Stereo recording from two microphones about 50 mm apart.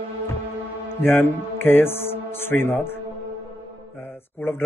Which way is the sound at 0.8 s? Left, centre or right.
Left.